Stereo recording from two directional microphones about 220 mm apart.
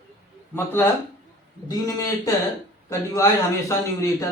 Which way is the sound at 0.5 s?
10° left (ahead or behind).